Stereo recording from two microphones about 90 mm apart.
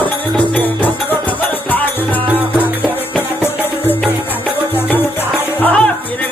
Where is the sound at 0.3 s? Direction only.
15° left (ahead or behind).